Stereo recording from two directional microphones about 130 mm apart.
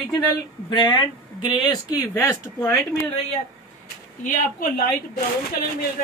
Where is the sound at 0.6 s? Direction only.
35° left (ahead or behind).